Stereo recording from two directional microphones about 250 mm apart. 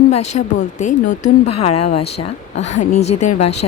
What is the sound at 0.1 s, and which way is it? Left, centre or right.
Speech, left.